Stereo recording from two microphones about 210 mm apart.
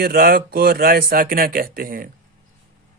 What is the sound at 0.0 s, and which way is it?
A man's voice, 45° right (ahead or behind).